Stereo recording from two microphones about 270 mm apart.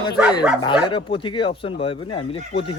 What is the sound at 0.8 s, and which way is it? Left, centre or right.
Speech, centre.